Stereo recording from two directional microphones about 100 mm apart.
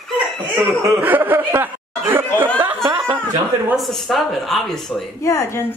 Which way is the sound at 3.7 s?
Centre (ahead or behind).